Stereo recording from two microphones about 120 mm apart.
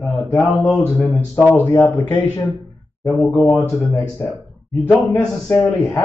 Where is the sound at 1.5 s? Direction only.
25° left (ahead or behind).